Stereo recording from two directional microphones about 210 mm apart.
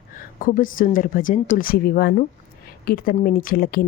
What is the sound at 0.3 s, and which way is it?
Speech, 40° left (ahead or behind).